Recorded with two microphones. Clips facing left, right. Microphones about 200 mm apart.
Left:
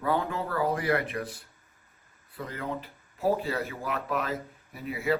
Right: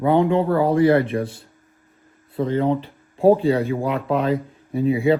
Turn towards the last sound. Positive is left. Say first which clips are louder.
# right 13 dB
turn(degrees=-25)  # may be behind; listen again after turning